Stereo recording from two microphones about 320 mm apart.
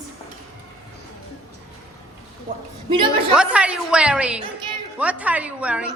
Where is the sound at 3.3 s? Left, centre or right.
Centre.